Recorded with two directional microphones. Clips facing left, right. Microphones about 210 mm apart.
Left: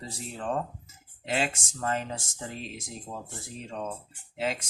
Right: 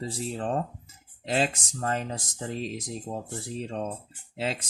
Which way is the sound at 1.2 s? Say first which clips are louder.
Right 3 dB; 35° right (ahead or behind).